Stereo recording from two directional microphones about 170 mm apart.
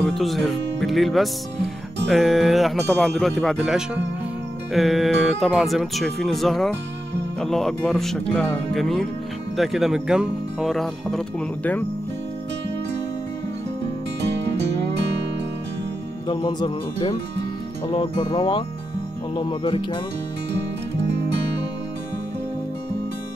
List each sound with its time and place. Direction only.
0.0 s speech: centre (ahead or behind)
16.3 s music: 25° left (ahead or behind)